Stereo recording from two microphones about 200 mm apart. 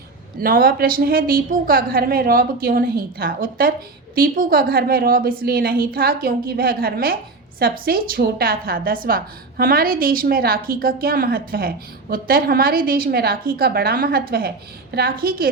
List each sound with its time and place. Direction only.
0.3 s a woman's voice: 45° right (ahead or behind)